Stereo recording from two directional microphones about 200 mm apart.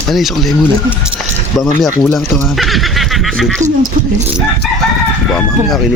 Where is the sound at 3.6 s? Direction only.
35° right (ahead or behind).